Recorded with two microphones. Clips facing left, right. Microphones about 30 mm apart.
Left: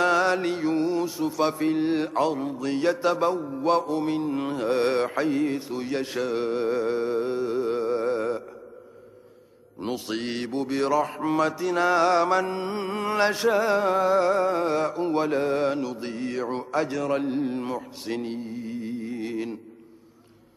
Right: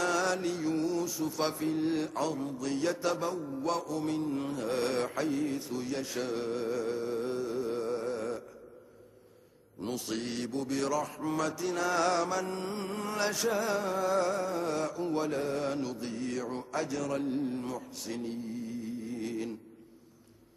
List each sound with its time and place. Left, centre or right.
0.0 s music: left
1.6 s mantra: left
6.3 s music: left
9.8 s mantra: left